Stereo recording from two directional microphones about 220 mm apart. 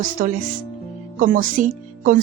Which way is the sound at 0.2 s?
40° right (ahead or behind).